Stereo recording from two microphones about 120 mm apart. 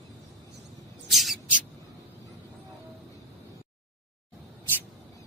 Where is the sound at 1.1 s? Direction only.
Centre (ahead or behind).